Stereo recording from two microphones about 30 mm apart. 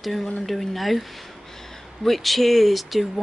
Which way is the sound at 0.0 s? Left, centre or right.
Centre.